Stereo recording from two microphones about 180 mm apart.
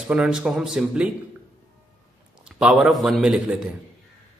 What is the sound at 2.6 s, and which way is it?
Speech, centre (ahead or behind).